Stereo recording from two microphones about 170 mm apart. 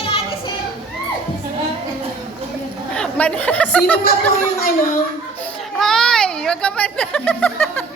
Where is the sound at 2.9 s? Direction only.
5° left (ahead or behind).